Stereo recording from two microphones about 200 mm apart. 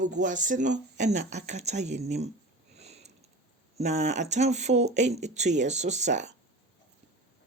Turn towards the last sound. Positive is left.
turn(degrees=-35)  # may be behind; listen again after turning